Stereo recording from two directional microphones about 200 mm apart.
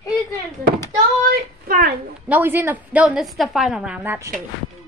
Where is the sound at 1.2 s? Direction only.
45° right (ahead or behind).